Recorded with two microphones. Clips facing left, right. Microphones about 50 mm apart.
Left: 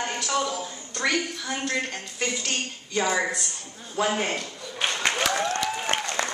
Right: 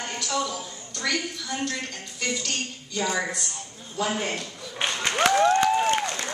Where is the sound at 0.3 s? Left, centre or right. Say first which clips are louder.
Even; left.